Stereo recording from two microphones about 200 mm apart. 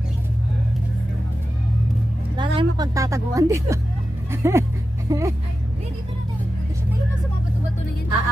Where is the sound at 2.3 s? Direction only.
20° right (ahead or behind).